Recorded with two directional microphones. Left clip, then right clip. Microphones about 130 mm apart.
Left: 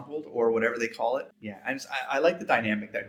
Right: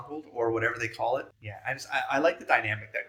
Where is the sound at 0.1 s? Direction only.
20° left (ahead or behind).